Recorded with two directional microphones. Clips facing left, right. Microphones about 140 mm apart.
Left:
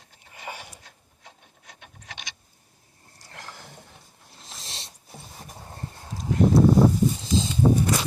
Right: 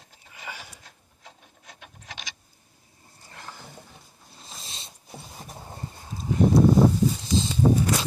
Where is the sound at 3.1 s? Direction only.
90° left.